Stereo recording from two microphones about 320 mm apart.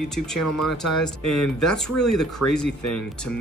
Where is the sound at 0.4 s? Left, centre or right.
Left.